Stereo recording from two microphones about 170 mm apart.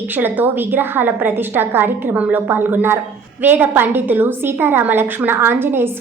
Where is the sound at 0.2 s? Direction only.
10° right (ahead or behind).